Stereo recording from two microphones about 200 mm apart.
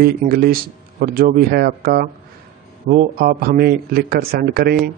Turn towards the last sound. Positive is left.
turn(degrees=-50)  # may be behind; listen again after turning